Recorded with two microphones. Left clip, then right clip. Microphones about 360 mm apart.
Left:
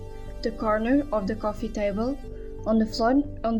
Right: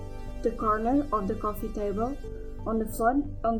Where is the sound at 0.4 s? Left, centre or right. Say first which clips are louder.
Left 1 dB; centre.